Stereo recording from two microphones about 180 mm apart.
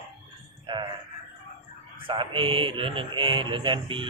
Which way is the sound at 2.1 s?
30° right (ahead or behind).